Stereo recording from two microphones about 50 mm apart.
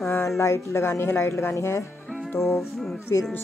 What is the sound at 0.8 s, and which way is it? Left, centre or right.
Speech, left.